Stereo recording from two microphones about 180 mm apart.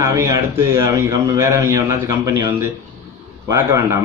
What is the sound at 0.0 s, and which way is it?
A man's voice, 15° right (ahead or behind).